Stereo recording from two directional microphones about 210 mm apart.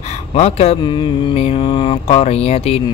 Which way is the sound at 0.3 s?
30° left (ahead or behind).